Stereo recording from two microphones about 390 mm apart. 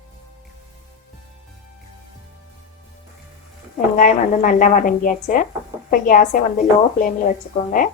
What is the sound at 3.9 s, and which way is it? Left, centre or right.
A woman's voice, centre.